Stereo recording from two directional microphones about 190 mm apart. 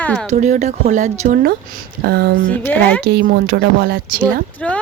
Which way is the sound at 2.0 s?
60° right (ahead or behind).